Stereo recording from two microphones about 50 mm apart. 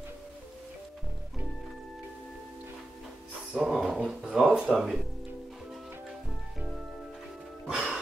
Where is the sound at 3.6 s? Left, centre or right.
Centre.